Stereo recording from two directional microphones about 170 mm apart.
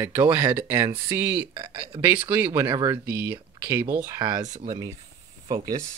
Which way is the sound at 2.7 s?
25° right (ahead or behind).